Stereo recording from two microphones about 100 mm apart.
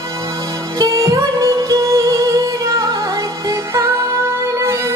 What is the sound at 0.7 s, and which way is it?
Music, 35° right (ahead or behind).